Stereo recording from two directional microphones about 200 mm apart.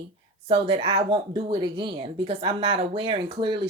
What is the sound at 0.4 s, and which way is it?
Speech, 30° right (ahead or behind).